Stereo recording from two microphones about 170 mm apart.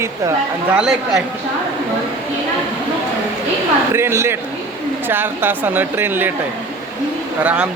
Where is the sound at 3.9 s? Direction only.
15° right (ahead or behind).